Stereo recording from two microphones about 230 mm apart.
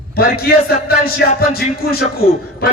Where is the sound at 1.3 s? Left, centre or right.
Left.